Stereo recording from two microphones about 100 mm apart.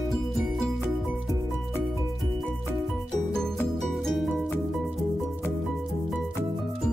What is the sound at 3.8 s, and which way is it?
Music, centre (ahead or behind).